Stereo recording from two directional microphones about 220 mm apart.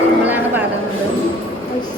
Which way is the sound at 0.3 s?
10° right (ahead or behind).